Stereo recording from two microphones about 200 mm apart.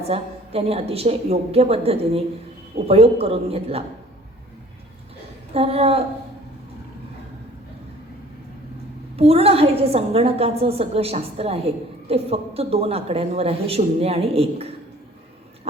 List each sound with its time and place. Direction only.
0.1 s a woman's voice: 30° right (ahead or behind)
5.5 s a woman's voice: 30° right (ahead or behind)
9.1 s a woman's voice: 30° right (ahead or behind)